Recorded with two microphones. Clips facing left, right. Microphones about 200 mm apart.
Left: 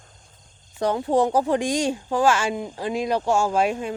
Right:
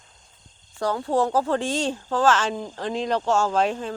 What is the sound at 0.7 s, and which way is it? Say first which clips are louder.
Speech: left 2 dB; 20° left (ahead or behind).